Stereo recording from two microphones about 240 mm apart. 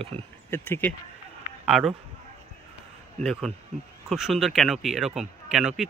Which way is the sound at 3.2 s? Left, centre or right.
Centre.